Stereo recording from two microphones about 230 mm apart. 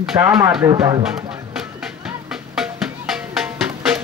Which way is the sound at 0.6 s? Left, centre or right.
Centre.